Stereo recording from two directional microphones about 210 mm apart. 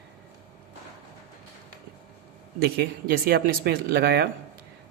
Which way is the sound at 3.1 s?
45° right (ahead or behind).